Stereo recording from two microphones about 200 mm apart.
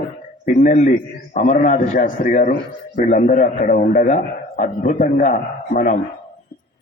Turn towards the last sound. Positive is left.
turn(degrees=40)  # may be behind; listen again after turning